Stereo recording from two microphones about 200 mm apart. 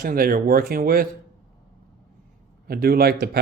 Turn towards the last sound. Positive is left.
turn(degrees=-50)  # may be behind; listen again after turning